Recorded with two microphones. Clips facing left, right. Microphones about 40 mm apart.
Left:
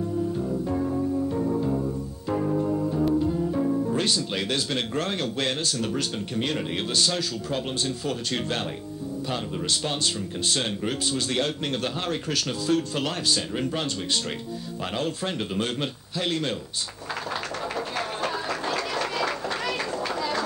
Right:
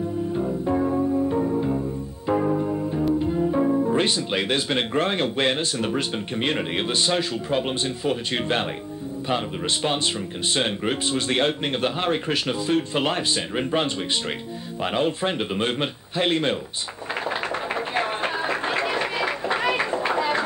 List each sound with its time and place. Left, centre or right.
0.3 s music: right
3.2 s speech: right
10.5 s speech: right
15.0 s speech: right
17.7 s a sound: right